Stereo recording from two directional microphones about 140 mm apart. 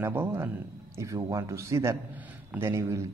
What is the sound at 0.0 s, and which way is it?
Speech, 15° right (ahead or behind).